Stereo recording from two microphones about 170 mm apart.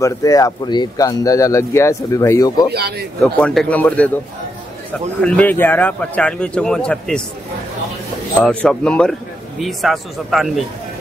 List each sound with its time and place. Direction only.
0.0 s speech: 20° left (ahead or behind)
2.7 s speech: 70° right (ahead or behind)
3.2 s speech: 5° left (ahead or behind)
5.2 s speech: 10° left (ahead or behind)
8.4 s a man's voice: 5° left (ahead or behind)